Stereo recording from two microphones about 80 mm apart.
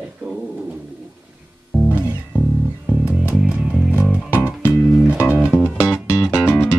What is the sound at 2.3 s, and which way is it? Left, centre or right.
Music, centre.